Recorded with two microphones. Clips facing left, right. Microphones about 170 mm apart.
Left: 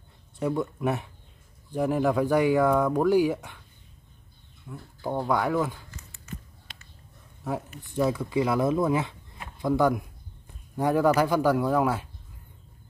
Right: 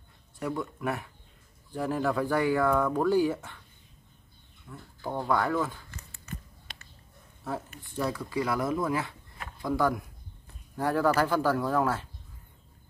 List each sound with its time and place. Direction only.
0.4 s speech: 20° left (ahead or behind)
4.6 s speech: 15° left (ahead or behind)
7.8 s speech: 20° left (ahead or behind)